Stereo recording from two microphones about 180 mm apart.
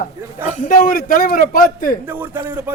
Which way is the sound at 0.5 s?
50° left (ahead or behind).